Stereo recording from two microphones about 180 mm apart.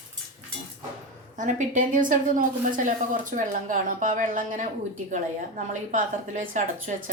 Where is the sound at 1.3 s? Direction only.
45° right (ahead or behind).